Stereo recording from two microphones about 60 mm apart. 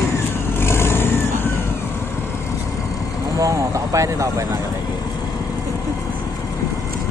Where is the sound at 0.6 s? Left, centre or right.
Left.